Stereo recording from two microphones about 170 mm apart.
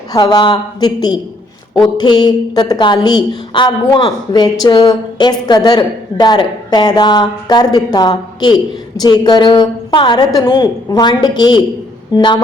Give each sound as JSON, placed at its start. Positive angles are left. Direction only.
{"t": 0.1, "sound": "a woman's voice", "side_deg": 25}